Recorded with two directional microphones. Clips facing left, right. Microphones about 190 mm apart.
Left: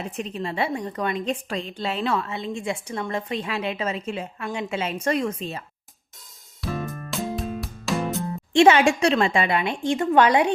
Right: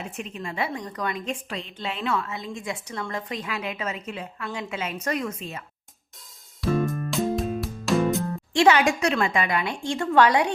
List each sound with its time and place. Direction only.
0.2 s a woman's voice: 30° left (ahead or behind)
6.6 s music: centre (ahead or behind)
8.5 s a woman's voice: 25° left (ahead or behind)